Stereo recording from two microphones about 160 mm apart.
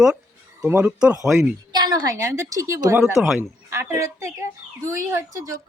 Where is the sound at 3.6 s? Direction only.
15° right (ahead or behind).